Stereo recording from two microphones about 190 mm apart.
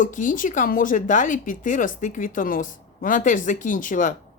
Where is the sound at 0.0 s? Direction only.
45° left (ahead or behind).